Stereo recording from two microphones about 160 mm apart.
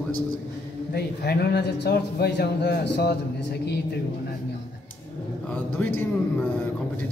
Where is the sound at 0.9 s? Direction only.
85° left.